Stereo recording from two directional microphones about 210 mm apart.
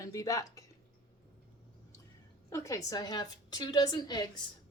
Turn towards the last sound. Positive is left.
turn(degrees=20)  # may be behind; listen again after turning